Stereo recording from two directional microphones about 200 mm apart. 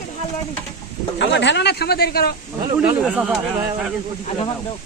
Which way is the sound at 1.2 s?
60° left (ahead or behind).